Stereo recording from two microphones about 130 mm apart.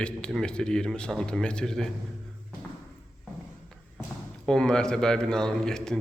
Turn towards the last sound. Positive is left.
turn(degrees=5)  # may be behind; listen again after turning